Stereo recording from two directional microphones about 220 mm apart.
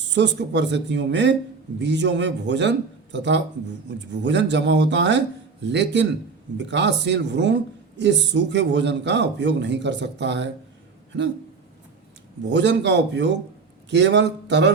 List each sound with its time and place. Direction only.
0.1 s speech: 55° right (ahead or behind)
12.5 s speech: 55° right (ahead or behind)